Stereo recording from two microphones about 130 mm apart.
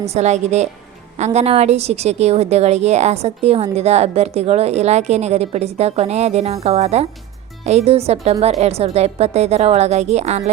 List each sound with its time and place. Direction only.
0.1 s a woman's voice: 60° right (ahead or behind)